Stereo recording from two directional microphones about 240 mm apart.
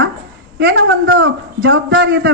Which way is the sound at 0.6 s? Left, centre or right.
Right.